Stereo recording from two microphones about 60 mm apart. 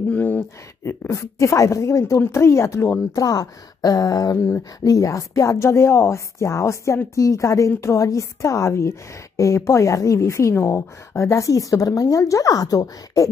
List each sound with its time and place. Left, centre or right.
0.1 s a sound: left
1.1 s speech: left
3.2 s a woman's voice: left
4.4 s speech: left
4.7 s a woman's voice: left